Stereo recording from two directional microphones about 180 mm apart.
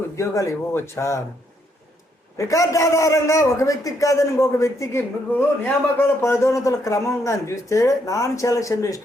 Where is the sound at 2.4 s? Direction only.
20° left (ahead or behind).